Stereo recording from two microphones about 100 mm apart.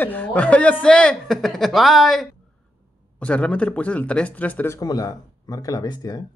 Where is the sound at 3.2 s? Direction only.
10° left (ahead or behind).